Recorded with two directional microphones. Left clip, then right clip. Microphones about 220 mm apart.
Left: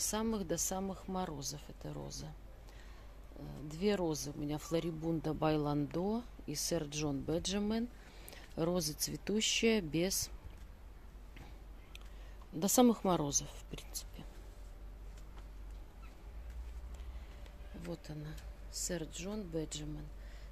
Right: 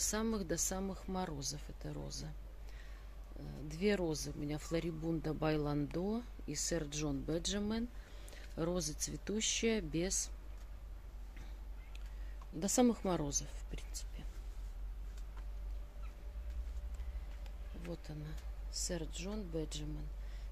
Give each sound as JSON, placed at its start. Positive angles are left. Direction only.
{"t": 0.0, "sound": "speech", "side_deg": 5}
{"t": 3.3, "sound": "speech", "side_deg": 5}
{"t": 12.5, "sound": "speech", "side_deg": 20}
{"t": 17.8, "sound": "speech", "side_deg": 15}